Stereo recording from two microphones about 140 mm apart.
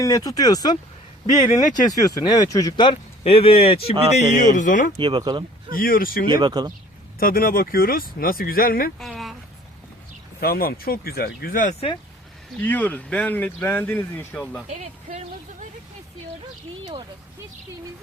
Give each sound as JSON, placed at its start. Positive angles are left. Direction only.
{"t": 0.0, "sound": "speech", "side_deg": 25}
{"t": 4.4, "sound": "speech", "side_deg": 65}
{"t": 4.9, "sound": "speech", "side_deg": -35}
{"t": 5.7, "sound": "speech", "side_deg": 90}
{"t": 6.4, "sound": "speech", "side_deg": -30}
{"t": 7.2, "sound": "speech", "side_deg": 90}
{"t": 9.0, "sound": "a sound", "side_deg": 0}
{"t": 10.4, "sound": "speech", "side_deg": 90}
{"t": 12.5, "sound": "speech", "side_deg": 10}
{"t": 14.7, "sound": "speech", "side_deg": -55}